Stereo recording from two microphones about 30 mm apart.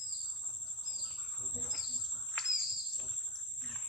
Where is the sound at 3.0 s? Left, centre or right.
Centre.